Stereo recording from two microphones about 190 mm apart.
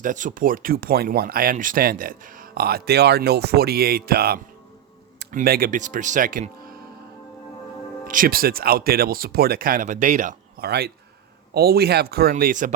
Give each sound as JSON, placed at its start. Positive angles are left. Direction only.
{"t": 0.0, "sound": "speech", "side_deg": -45}
{"t": 8.0, "sound": "speech", "side_deg": -45}
{"t": 10.7, "sound": "speech", "side_deg": -60}